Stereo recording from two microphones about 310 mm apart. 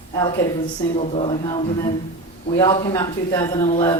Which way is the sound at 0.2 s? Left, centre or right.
Centre.